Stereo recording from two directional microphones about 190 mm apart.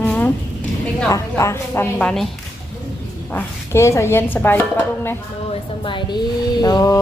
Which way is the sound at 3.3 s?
15° left (ahead or behind).